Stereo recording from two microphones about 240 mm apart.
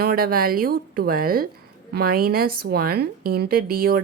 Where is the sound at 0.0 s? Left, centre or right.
Right.